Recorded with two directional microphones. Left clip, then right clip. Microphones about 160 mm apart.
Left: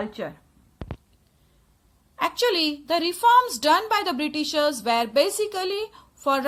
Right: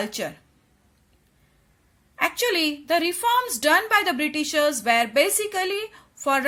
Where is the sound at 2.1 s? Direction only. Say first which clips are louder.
Even; 10° right (ahead or behind).